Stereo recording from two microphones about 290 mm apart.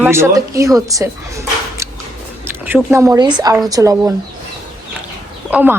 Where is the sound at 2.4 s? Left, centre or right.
Centre.